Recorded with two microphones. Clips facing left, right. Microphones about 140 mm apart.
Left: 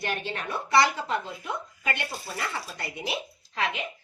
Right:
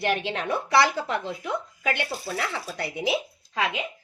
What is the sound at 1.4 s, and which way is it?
Speech, 85° right.